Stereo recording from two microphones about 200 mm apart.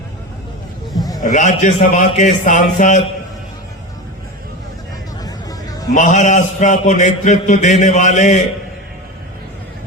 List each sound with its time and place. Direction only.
1.2 s a man's voice: 40° left (ahead or behind)
5.2 s vehicle: 20° left (ahead or behind)
5.9 s a man's voice: 35° left (ahead or behind)